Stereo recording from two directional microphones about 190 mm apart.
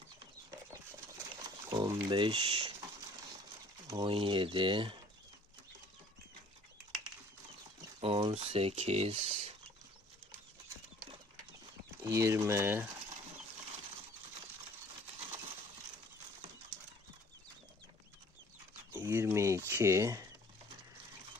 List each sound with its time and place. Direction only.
1.5 s pigeon: 20° right (ahead or behind)
3.8 s speech: 20° right (ahead or behind)
8.0 s speech: 30° right (ahead or behind)
12.0 s speech: 15° right (ahead or behind)
18.9 s speech: 10° right (ahead or behind)